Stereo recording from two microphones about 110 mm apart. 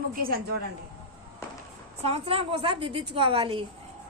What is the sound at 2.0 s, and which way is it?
A woman's voice, 65° right (ahead or behind).